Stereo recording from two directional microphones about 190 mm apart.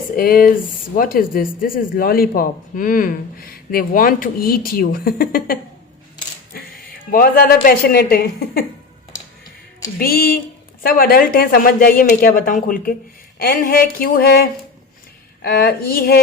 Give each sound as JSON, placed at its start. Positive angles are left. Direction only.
{"t": 0.2, "sound": "speech", "side_deg": 50}
{"t": 10.0, "sound": "speech", "side_deg": 55}